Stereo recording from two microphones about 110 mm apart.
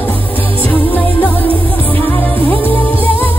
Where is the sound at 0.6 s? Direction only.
15° left (ahead or behind).